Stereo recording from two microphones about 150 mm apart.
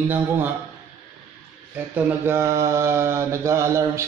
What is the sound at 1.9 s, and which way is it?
Mantra, 15° right (ahead or behind).